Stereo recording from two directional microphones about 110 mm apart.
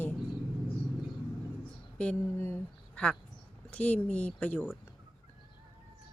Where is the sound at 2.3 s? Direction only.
20° left (ahead or behind).